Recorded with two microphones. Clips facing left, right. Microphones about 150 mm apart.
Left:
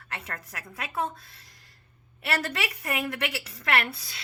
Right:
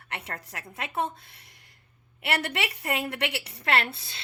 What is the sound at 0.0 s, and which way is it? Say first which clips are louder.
A woman's voice: right 1 dB; 25° right (ahead or behind).